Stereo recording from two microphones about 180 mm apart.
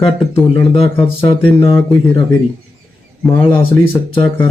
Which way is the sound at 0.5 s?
30° left (ahead or behind).